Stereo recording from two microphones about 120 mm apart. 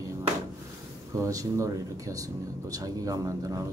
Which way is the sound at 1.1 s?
25° right (ahead or behind).